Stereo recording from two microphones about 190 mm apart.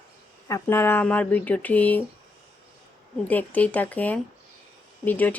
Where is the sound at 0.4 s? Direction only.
15° left (ahead or behind).